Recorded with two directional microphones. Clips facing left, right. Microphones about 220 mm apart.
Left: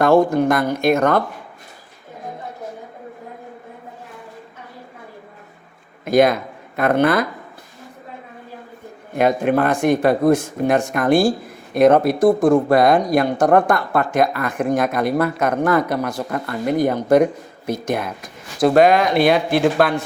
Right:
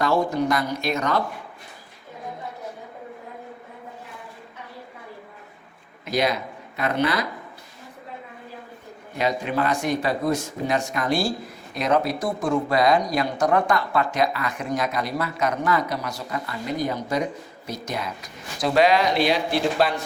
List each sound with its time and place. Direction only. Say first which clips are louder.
0.0 s speech: left 8 dB; 55° left (ahead or behind)
6.1 s speech: left 9 dB; 50° left (ahead or behind)
9.1 s speech: left 8 dB; 55° left (ahead or behind)